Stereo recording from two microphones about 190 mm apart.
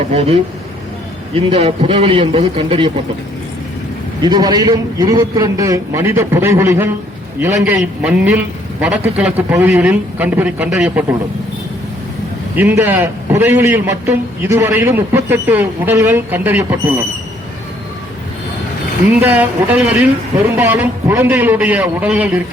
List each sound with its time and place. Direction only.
0.1 s a man's voice: 35° right (ahead or behind)
4.2 s a man's voice: 20° right (ahead or behind)
12.5 s a man's voice: 10° right (ahead or behind)
19.2 s a man's voice: 10° right (ahead or behind)